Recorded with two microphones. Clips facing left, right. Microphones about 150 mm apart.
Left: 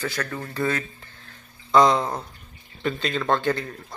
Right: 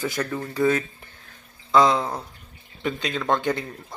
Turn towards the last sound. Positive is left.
turn(degrees=-15)  # may be behind; listen again after turning